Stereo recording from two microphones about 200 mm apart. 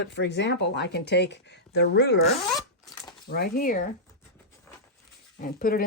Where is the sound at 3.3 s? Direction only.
50° left (ahead or behind).